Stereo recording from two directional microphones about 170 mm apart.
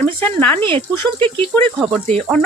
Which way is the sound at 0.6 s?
30° right (ahead or behind).